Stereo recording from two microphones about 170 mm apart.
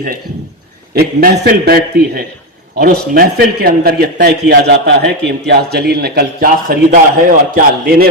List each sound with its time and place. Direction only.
0.9 s a man's voice: 65° right (ahead or behind)
6.9 s a man's voice: 50° right (ahead or behind)